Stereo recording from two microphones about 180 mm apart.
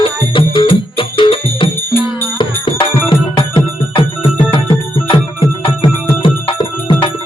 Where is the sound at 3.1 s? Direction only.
30° left (ahead or behind).